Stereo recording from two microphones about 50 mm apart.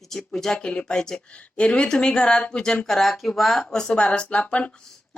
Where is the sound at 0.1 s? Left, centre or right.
Centre.